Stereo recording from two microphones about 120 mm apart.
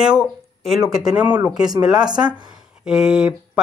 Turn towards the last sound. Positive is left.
turn(degrees=-5)  # may be behind; listen again after turning